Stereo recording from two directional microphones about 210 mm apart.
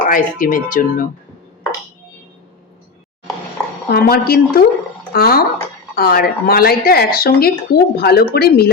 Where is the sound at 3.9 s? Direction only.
45° left (ahead or behind).